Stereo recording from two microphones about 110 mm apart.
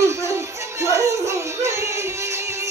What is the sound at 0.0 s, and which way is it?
Music, 25° right (ahead or behind).